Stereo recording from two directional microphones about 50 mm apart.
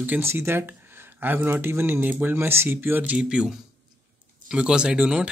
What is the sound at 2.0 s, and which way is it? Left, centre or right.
Speech, right.